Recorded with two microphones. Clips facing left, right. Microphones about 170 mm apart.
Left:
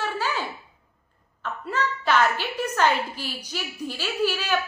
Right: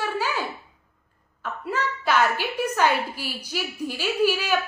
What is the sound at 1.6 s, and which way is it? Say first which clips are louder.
A woman's voice: even; 10° right (ahead or behind).